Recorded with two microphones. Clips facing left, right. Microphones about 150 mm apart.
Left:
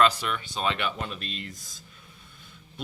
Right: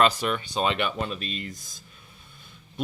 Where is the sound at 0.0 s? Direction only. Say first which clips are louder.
Right 1 dB; 20° right (ahead or behind).